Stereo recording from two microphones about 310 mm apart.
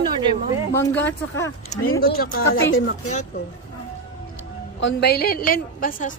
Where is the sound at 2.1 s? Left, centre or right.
Left.